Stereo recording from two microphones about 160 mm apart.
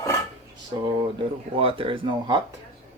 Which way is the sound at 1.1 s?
35° right (ahead or behind).